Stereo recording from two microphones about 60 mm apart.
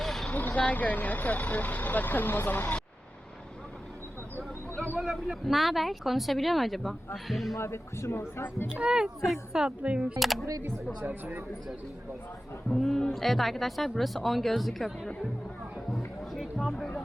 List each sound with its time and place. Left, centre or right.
0.0 s vehicle: centre
0.3 s speech: left
5.3 s speech: centre
7.5 s speech: left
8.7 s a woman's voice: centre
9.8 s speech: right
10.2 s speech: centre
11.0 s speech: right
12.7 s speech: centre
15.9 s music: centre